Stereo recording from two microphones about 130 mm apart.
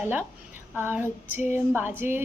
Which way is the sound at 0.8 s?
15° right (ahead or behind).